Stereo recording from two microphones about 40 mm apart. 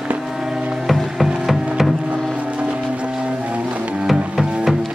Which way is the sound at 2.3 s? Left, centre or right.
Right.